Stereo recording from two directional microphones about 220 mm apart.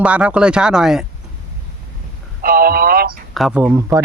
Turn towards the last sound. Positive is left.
turn(degrees=-15)  # may be behind; listen again after turning